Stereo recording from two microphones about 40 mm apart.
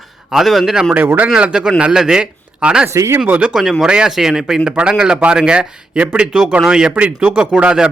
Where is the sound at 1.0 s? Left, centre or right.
Right.